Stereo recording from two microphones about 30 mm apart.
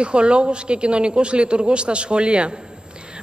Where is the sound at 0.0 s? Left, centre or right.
Right.